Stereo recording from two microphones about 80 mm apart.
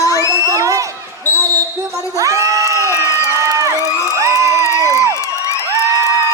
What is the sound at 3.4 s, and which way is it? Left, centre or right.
Crowd, right.